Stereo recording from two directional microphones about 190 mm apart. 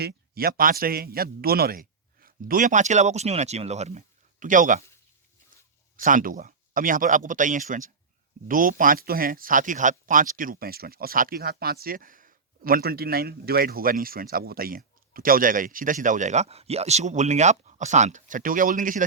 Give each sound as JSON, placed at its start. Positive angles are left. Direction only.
{"t": 0.0, "sound": "speech", "side_deg": -55}
{"t": 6.0, "sound": "speech", "side_deg": -45}